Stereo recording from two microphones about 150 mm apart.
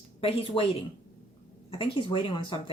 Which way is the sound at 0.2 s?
40° left (ahead or behind).